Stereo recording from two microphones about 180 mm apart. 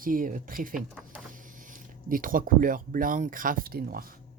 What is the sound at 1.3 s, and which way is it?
Speech, 45° right (ahead or behind).